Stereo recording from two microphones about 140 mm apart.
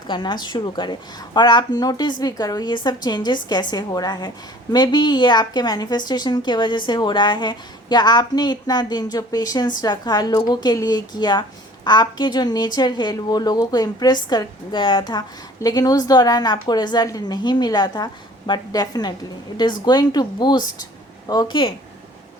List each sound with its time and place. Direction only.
0.1 s a woman's voice: 35° left (ahead or behind)